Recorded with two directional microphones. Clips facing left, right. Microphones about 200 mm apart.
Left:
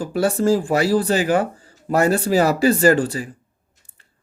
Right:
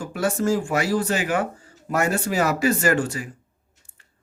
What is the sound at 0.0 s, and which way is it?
Speech, 35° left (ahead or behind).